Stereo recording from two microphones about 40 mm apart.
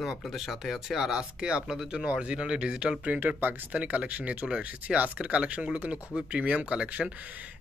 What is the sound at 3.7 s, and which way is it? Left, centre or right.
Speech, right.